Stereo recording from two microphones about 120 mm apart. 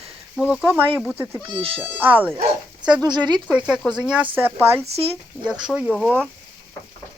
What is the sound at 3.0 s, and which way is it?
Speech, 35° right (ahead or behind).